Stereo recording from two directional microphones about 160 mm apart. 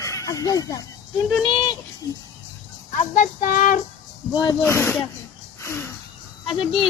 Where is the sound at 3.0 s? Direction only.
50° left (ahead or behind).